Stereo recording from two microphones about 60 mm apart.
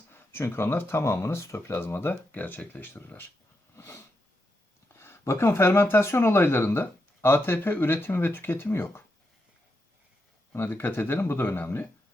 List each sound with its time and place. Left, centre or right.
0.1 s speech: left
4.9 s speech: left
10.5 s speech: left